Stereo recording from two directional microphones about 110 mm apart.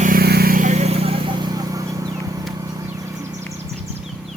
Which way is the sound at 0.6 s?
80° right.